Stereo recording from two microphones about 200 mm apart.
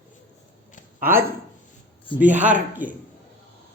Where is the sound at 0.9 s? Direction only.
10° right (ahead or behind).